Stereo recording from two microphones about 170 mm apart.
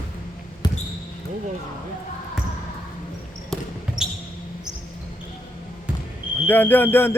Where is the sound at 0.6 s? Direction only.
25° left (ahead or behind).